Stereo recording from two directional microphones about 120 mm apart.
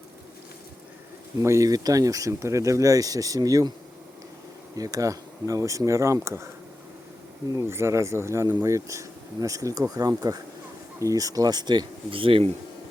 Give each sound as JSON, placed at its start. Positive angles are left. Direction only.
{"t": 1.4, "sound": "speech", "side_deg": -25}
{"t": 4.8, "sound": "speech", "side_deg": -30}
{"t": 7.5, "sound": "speech", "side_deg": -25}